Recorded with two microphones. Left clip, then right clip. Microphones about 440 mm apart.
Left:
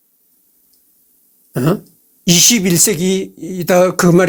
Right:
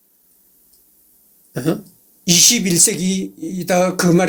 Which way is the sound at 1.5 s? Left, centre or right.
Left.